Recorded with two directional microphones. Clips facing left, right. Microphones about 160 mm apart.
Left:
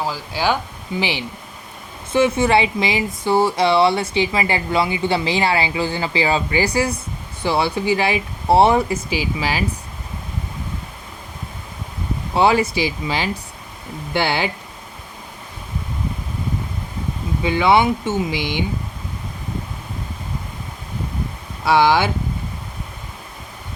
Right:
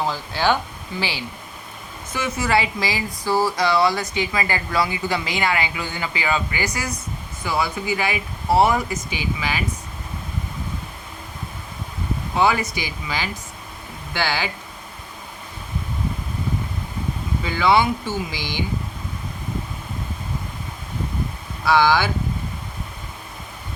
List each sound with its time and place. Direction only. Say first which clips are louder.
0.0 s speech: even; 10° left (ahead or behind)
2.1 s speech: left 6 dB; 30° left (ahead or behind)
12.3 s speech: left 4 dB; 30° left (ahead or behind)
17.4 s speech: left 3 dB; 20° left (ahead or behind)
21.6 s speech: left 2 dB; 20° left (ahead or behind)